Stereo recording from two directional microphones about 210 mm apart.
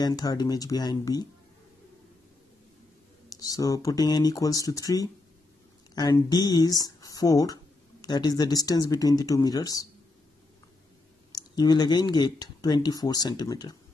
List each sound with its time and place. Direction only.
0.0 s speech: 20° left (ahead or behind)
3.3 s speech: 15° left (ahead or behind)
11.3 s speech: 20° left (ahead or behind)